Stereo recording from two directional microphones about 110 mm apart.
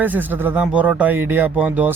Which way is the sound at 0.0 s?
15° right (ahead or behind).